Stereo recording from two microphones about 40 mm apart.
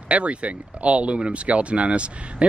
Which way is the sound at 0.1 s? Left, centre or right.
Right.